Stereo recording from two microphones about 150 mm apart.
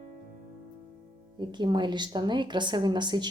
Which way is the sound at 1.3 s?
30° right (ahead or behind).